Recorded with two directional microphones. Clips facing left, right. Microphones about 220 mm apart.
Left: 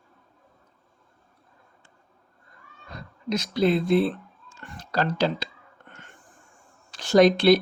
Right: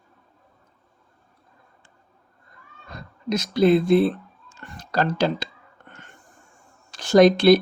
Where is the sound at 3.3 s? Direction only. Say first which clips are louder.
Right 5 dB; 45° right (ahead or behind).